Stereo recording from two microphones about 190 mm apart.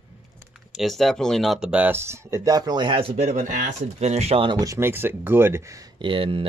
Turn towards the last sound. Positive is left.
turn(degrees=-30)  # may be behind; listen again after turning